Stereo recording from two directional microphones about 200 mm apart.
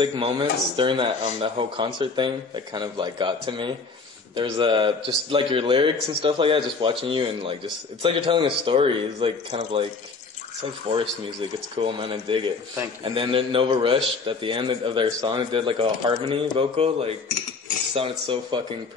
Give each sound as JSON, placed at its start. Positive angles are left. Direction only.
{"t": 0.0, "sound": "a man's voice", "side_deg": -25}